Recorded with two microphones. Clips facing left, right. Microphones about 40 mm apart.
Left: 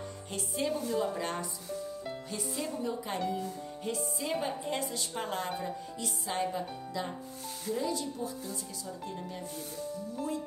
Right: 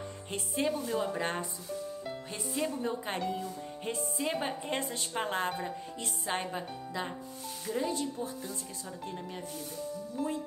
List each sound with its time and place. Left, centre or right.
0.3 s speech: right
2.5 s speech: right
3.2 s speech: centre
4.2 s speech: right